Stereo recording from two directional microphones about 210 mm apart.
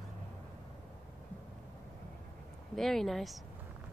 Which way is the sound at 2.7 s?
Centre (ahead or behind).